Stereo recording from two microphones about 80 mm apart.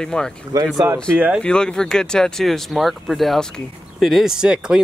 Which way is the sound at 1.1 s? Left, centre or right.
Centre.